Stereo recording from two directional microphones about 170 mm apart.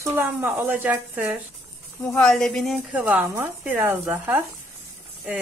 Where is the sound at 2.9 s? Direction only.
10° right (ahead or behind).